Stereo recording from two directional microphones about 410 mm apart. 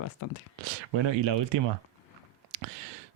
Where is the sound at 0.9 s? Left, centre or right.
Right.